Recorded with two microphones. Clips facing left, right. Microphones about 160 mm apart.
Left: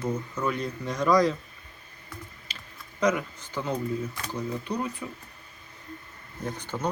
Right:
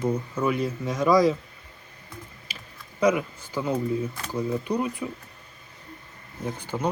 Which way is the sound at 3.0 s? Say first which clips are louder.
Right 3 dB; 10° right (ahead or behind).